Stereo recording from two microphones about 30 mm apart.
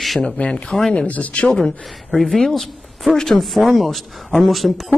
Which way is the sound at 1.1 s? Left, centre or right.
Left.